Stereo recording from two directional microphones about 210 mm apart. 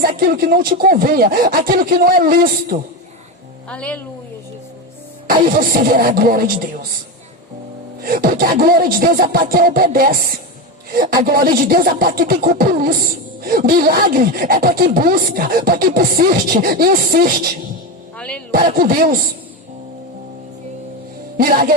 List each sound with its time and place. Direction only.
0.2 s speech: 45° right (ahead or behind)
3.7 s speech: 5° left (ahead or behind)
5.3 s speech: 45° right (ahead or behind)
8.0 s speech: 45° right (ahead or behind)
11.2 s speech: 45° right (ahead or behind)
18.2 s speech: 5° left (ahead or behind)
18.5 s speech: 45° right (ahead or behind)
21.3 s music: 45° right (ahead or behind)